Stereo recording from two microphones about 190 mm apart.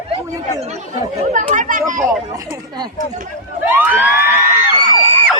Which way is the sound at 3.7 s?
10° right (ahead or behind).